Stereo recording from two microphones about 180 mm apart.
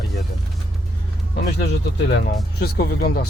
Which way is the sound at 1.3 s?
65° left (ahead or behind).